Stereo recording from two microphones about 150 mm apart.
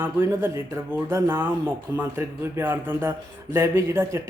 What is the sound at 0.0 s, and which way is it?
Speech, 15° right (ahead or behind).